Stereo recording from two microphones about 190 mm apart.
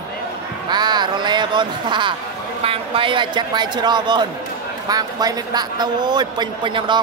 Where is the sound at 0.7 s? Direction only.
20° right (ahead or behind).